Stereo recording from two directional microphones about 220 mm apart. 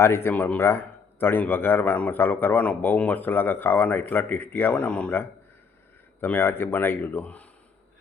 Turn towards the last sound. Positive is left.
turn(degrees=5)  # may be behind; listen again after turning